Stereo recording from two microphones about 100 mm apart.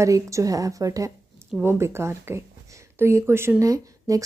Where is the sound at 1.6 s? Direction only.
25° right (ahead or behind).